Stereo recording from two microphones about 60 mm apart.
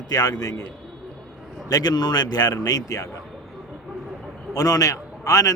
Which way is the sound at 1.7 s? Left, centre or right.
Left.